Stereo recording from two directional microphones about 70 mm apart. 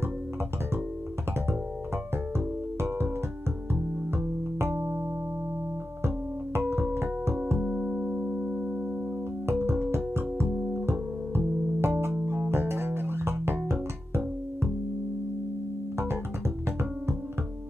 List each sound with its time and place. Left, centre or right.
2.3 s music: right
4.6 s music: right
6.7 s music: right
7.6 s music: centre
9.5 s music: right
12.4 s music: right